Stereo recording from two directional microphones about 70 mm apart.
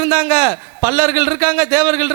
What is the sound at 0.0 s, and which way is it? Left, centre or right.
A man's voice, right.